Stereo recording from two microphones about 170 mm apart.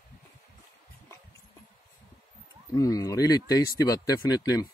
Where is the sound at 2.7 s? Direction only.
20° left (ahead or behind).